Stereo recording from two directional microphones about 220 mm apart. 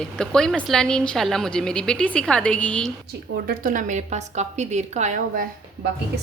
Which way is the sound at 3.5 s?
40° right (ahead or behind).